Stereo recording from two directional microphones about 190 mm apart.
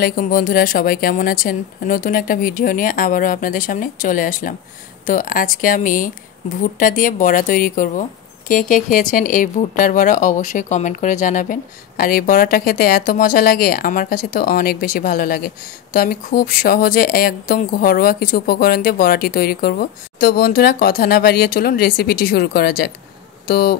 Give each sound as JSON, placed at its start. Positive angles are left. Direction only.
{"t": 0.0, "sound": "speech", "side_deg": 50}